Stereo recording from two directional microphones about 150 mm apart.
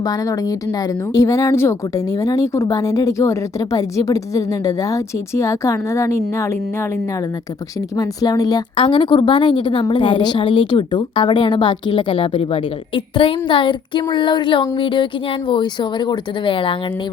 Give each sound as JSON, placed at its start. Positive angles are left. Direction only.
{"t": 0.0, "sound": "speech", "side_deg": 25}
{"t": 7.9, "sound": "a woman's voice", "side_deg": 25}